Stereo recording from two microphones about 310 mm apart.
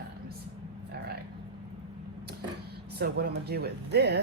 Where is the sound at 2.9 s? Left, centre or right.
Right.